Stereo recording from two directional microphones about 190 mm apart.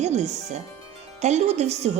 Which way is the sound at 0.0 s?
35° right (ahead or behind).